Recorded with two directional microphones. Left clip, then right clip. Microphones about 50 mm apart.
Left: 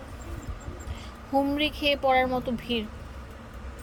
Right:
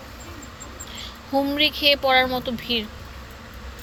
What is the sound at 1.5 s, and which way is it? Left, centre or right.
Speech, left.